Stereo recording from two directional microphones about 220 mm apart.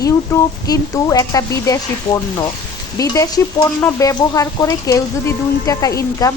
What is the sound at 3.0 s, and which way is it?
Frying, 15° left (ahead or behind).